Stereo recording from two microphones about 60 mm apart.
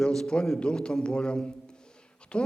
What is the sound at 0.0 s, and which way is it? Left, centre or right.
A man's voice, centre.